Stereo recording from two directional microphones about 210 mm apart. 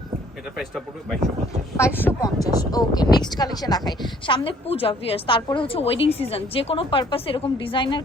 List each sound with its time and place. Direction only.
2.0 s a woman's voice: 15° left (ahead or behind)